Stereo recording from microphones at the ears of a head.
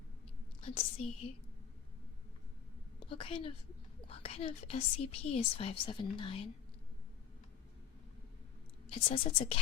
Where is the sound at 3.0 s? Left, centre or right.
Left.